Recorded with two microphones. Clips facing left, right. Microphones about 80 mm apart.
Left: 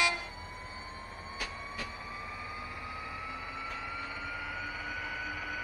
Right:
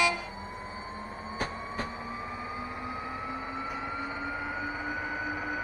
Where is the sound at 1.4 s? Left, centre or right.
Right.